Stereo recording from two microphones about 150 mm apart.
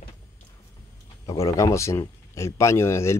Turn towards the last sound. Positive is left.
turn(degrees=15)  # may be behind; listen again after turning